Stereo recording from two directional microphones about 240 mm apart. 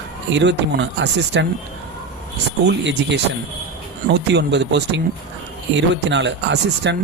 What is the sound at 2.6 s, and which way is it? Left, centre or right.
Speech, right.